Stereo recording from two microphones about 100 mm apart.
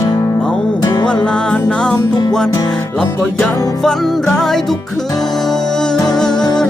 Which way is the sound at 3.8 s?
5° left (ahead or behind).